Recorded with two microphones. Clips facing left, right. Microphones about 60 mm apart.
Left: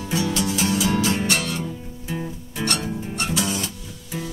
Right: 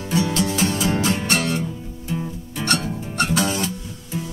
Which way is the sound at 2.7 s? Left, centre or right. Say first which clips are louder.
Right 3 dB; right.